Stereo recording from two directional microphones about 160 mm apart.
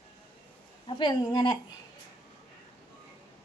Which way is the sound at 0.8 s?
30° left (ahead or behind).